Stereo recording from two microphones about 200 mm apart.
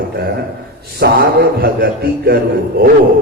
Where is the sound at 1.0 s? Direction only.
50° right (ahead or behind).